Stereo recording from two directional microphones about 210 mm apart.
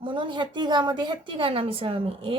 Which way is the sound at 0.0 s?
25° right (ahead or behind).